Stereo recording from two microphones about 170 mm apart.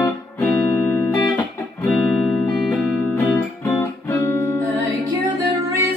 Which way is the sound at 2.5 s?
Centre (ahead or behind).